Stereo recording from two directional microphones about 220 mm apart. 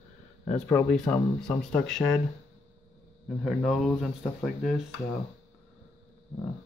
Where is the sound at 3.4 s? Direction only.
Centre (ahead or behind).